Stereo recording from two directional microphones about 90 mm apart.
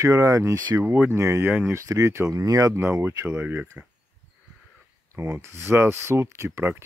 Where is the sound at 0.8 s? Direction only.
20° right (ahead or behind).